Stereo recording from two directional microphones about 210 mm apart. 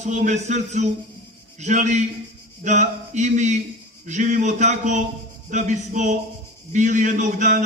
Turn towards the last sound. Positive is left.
turn(degrees=-35)  # may be behind; listen again after turning